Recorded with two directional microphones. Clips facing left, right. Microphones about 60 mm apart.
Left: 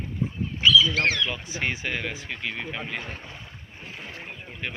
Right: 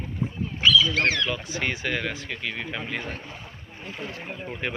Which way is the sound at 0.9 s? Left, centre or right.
Centre.